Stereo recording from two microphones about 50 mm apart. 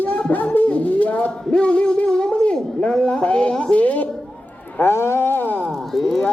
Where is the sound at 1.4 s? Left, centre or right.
Centre.